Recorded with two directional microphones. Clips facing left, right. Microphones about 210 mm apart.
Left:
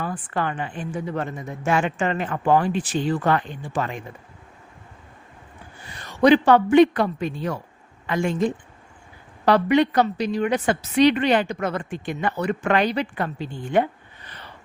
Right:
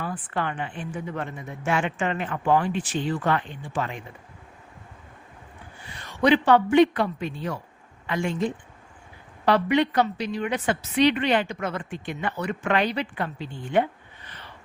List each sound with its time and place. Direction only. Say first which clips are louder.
0.0 s a woman's voice: left 3 dB; 45° left (ahead or behind)
5.9 s a woman's voice: left 4 dB; 40° left (ahead or behind)